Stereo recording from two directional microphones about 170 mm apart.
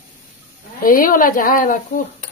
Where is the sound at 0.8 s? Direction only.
55° left (ahead or behind).